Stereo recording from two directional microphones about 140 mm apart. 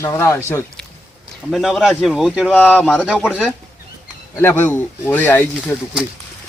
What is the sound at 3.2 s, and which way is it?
Speech, 10° right (ahead or behind).